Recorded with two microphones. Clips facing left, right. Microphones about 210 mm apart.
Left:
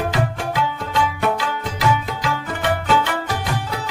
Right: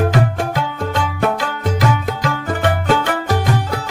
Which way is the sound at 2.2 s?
45° right (ahead or behind).